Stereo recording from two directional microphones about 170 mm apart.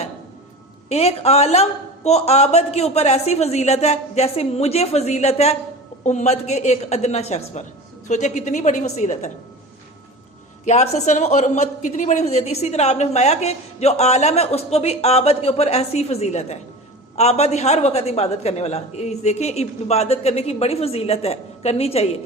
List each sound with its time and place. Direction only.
0.9 s a woman's voice: 35° left (ahead or behind)
10.7 s a woman's voice: 40° left (ahead or behind)